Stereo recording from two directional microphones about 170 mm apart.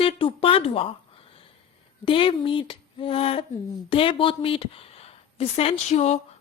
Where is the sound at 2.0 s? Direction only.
30° left (ahead or behind).